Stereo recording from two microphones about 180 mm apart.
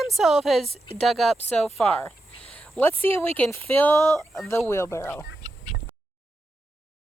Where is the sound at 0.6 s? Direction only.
35° right (ahead or behind).